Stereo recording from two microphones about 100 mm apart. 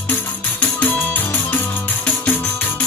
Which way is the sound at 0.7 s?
15° left (ahead or behind).